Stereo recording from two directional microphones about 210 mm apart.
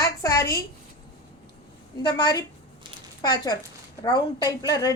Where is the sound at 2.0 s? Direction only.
20° left (ahead or behind).